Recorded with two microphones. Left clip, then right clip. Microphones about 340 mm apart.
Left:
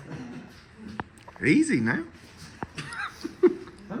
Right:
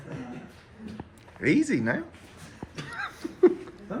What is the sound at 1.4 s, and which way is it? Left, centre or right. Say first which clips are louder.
Speech: left 2 dB; centre.